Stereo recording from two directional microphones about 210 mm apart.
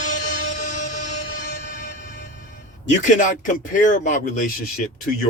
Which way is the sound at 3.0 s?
35° left (ahead or behind).